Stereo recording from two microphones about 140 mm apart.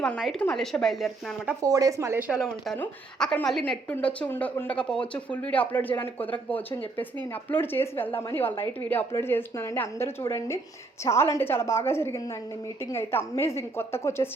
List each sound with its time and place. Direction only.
0.2 s speech: centre (ahead or behind)
1.6 s speech: 25° right (ahead or behind); by 2.7 s 5° right (ahead or behind)
2.7 s a woman's voice: 15° left (ahead or behind)